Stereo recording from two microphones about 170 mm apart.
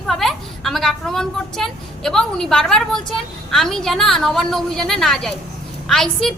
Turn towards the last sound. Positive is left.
turn(degrees=5)  # may be behind; listen again after turning